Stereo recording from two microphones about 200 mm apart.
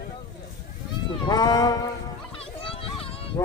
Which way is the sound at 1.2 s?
20° left (ahead or behind).